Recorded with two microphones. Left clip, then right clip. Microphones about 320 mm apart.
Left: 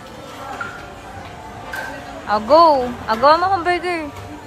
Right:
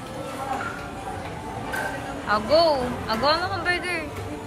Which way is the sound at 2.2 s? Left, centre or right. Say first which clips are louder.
Left 8 dB; centre.